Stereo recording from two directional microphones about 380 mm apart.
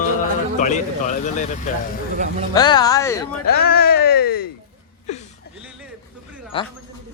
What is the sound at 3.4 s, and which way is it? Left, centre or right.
Speech, left.